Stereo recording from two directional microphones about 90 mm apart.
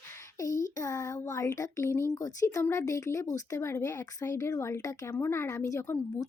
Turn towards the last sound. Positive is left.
turn(degrees=30)  # may be behind; listen again after turning